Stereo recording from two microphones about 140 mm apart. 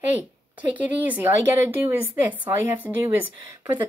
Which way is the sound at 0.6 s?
10° right (ahead or behind).